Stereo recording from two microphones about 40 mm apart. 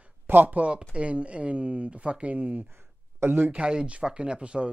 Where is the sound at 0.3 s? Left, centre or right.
Right.